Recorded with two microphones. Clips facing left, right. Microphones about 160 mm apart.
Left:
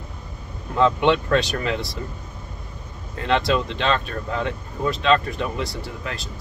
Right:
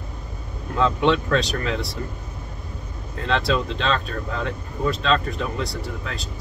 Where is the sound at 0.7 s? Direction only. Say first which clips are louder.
Left 2 dB; 5° left (ahead or behind).